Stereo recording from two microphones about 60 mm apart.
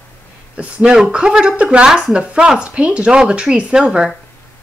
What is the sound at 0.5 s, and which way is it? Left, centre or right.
Speech, centre.